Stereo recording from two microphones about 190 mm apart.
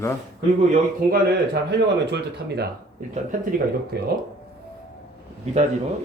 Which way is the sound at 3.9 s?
55° right (ahead or behind).